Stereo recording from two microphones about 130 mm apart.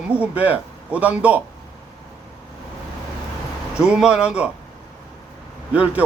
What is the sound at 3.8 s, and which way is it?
Speech, 5° right (ahead or behind).